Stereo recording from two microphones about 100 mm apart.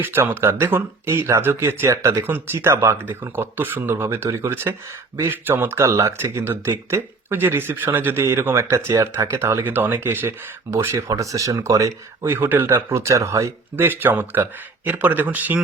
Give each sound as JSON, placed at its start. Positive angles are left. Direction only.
{"t": 0.0, "sound": "speech", "side_deg": -20}
{"t": 12.2, "sound": "speech", "side_deg": -20}